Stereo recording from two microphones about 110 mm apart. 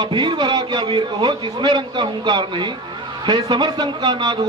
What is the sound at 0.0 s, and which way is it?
A man's voice, 45° right (ahead or behind).